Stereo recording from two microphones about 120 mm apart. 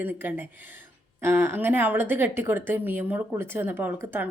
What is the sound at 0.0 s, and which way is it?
A woman's voice, 15° right (ahead or behind).